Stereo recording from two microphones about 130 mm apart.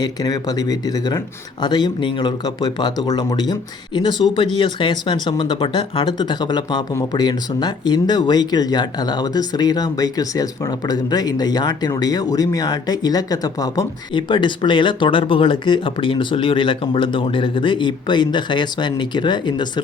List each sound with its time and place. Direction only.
0.0 s speech: 30° left (ahead or behind)